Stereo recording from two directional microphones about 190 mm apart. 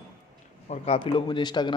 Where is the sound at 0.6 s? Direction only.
35° left (ahead or behind).